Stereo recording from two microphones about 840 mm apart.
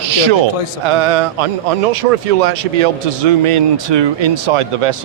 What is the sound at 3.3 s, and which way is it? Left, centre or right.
Speech, right.